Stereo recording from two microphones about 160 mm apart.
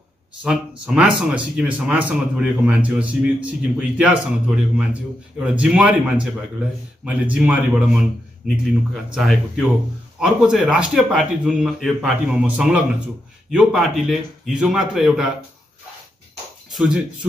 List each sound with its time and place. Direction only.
0.4 s speech: 5° right (ahead or behind)
16.7 s speech: 5° right (ahead or behind)